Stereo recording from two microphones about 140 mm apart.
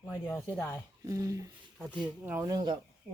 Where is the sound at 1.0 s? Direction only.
25° right (ahead or behind).